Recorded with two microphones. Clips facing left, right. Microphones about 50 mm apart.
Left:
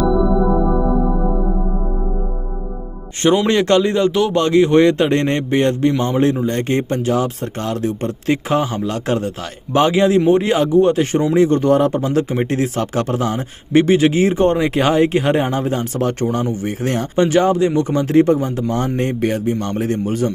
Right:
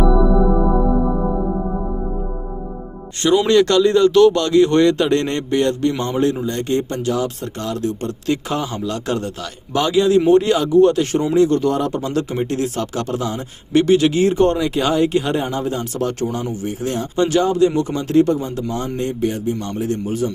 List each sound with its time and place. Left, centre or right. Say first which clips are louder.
3.2 s speech: left 1 dB; left
3.4 s speech: right 1 dB; left
6.4 s speech: left 2 dB; left
10.2 s speech: even; left
14.6 s speech: left 3 dB; left
17.2 s speech: even; left
18.9 s speech: left 2 dB; left